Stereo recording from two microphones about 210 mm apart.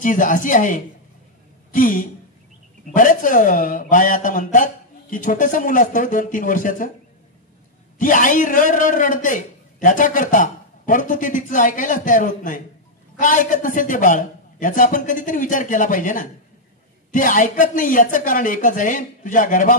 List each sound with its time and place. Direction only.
0.0 s a man's voice: 40° left (ahead or behind)
8.0 s a man's voice: 40° left (ahead or behind)